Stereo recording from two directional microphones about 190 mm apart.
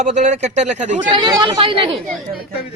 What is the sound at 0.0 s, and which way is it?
Speech, 40° right (ahead or behind).